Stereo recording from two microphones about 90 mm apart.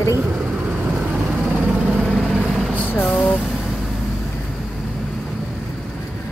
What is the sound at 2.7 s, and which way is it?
Vehicle, 15° left (ahead or behind).